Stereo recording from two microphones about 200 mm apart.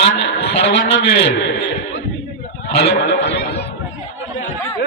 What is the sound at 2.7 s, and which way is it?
Speech, 55° left (ahead or behind).